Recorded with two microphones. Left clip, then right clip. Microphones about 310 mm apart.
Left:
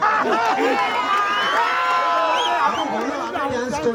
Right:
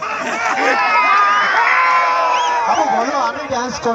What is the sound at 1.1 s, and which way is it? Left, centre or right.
Crowd, right.